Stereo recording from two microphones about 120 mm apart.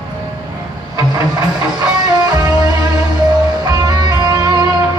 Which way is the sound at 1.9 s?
35° right (ahead or behind).